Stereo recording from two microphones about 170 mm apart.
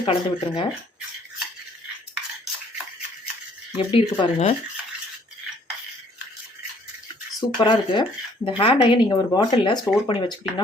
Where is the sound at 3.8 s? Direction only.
30° left (ahead or behind).